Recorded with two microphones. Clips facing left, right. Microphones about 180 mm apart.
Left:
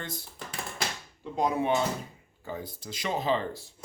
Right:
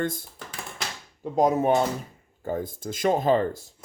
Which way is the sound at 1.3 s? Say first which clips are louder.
Right 6 dB; 45° right (ahead or behind).